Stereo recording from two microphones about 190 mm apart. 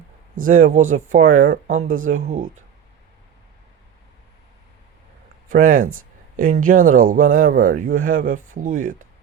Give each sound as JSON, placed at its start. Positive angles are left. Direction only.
{"t": 0.4, "sound": "speech", "side_deg": -45}
{"t": 1.9, "sound": "speech", "side_deg": -90}
{"t": 2.1, "sound": "speech", "side_deg": -40}
{"t": 5.5, "sound": "speech", "side_deg": -45}